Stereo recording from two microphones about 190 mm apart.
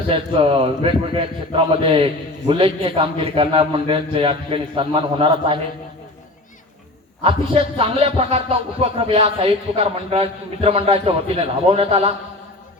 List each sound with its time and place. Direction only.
0.1 s a man's voice: 30° right (ahead or behind)
7.3 s music: 30° right (ahead or behind)